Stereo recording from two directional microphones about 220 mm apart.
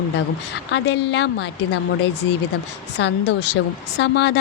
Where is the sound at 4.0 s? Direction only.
50° left (ahead or behind).